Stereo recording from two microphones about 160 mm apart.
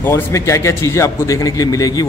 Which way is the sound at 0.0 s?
15° left (ahead or behind).